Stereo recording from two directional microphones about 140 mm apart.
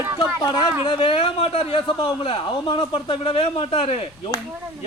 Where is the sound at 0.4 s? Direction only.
30° left (ahead or behind).